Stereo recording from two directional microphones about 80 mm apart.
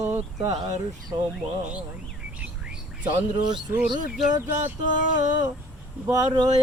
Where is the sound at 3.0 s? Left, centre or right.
Right.